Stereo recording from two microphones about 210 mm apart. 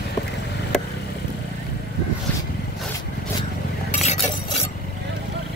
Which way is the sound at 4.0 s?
30° left (ahead or behind).